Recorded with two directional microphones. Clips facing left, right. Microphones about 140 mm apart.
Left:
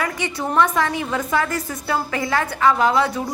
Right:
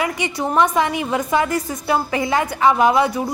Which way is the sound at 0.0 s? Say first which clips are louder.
Right 3 dB; 15° right (ahead or behind).